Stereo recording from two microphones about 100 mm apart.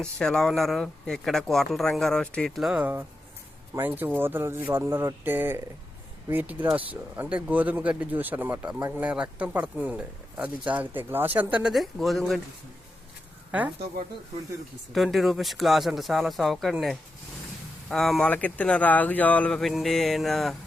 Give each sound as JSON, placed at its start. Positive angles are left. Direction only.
{"t": 0.0, "sound": "speech", "side_deg": 5}
{"t": 2.6, "sound": "speech", "side_deg": -5}
{"t": 2.8, "sound": "speech", "side_deg": -20}
{"t": 11.7, "sound": "speech", "side_deg": 0}
{"t": 14.9, "sound": "speech", "side_deg": 0}
{"t": 17.8, "sound": "speech", "side_deg": 5}